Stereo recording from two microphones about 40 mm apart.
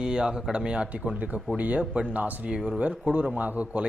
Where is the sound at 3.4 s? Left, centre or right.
Right.